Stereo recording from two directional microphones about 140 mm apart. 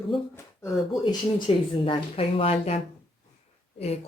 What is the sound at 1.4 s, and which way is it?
Speech, 40° left (ahead or behind).